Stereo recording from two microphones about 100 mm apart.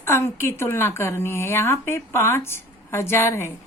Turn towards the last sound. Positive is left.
turn(degrees=25)  # may be behind; listen again after turning